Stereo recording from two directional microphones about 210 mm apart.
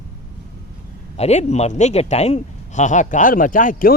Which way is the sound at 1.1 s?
30° left (ahead or behind).